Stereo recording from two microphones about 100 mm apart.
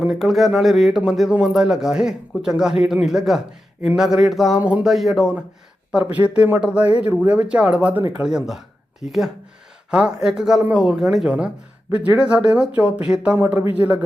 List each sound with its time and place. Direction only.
0.0 s speech: 5° right (ahead or behind)
4.6 s speech: 15° right (ahead or behind)
4.9 s speech: centre (ahead or behind)
6.1 s speech: 15° right (ahead or behind)